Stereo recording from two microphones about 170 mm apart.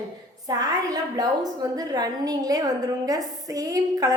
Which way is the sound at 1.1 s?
20° right (ahead or behind).